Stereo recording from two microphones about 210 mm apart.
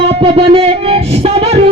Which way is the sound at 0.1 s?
25° right (ahead or behind).